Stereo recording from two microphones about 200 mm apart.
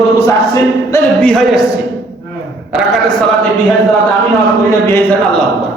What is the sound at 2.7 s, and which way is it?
Speech, 5° right (ahead or behind).